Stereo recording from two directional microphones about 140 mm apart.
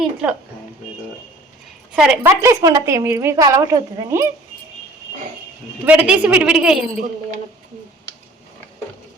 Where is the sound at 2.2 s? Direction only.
20° right (ahead or behind).